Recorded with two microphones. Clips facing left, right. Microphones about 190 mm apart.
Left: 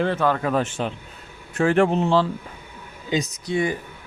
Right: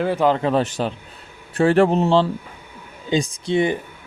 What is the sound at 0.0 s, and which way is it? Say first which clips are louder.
Speech: right 3 dB; 10° right (ahead or behind).